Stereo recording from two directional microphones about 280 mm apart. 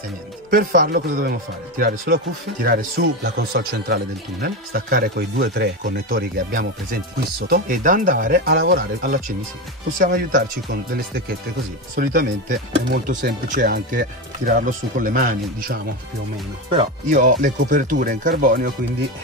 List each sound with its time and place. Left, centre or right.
0.5 s speech: right